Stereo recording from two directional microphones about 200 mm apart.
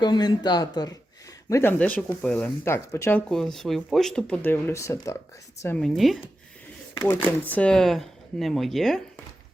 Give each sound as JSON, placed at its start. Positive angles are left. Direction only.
{"t": 0.0, "sound": "speech", "side_deg": 20}
{"t": 5.6, "sound": "speech", "side_deg": 5}
{"t": 7.4, "sound": "speech", "side_deg": 5}